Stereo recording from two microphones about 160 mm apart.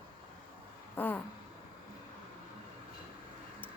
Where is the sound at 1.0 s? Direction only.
10° left (ahead or behind).